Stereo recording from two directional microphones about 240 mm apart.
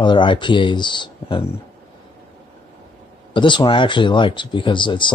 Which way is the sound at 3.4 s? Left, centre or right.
Centre.